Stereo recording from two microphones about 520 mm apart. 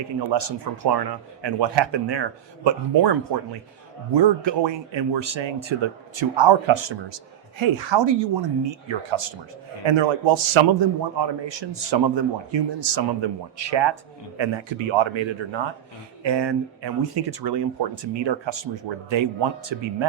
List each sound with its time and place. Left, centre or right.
0.3 s a man's voice: right